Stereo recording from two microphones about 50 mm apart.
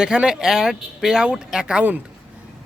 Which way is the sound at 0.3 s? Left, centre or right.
Centre.